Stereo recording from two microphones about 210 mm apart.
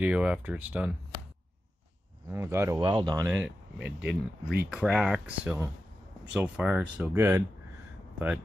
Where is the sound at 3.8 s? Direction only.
55° right (ahead or behind).